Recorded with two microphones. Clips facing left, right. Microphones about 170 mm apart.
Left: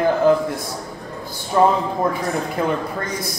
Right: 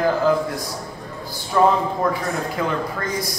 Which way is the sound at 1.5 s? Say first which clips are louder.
Left 1 dB; 25° left (ahead or behind).